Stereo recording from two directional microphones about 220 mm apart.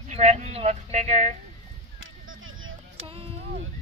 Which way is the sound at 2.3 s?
65° right (ahead or behind).